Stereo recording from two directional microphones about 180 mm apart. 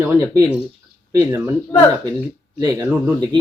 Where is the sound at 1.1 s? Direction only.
15° right (ahead or behind).